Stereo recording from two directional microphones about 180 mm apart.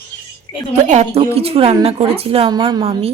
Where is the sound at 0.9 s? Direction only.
35° right (ahead or behind).